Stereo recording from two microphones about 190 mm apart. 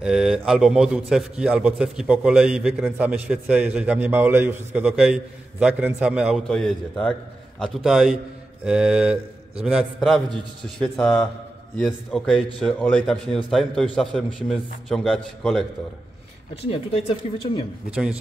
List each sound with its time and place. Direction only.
0.0 s a man's voice: 5° right (ahead or behind)
16.7 s speech: 25° left (ahead or behind)
17.9 s a man's voice: 5° right (ahead or behind)